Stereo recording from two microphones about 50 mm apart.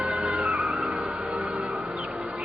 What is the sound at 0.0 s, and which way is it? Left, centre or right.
Music, centre.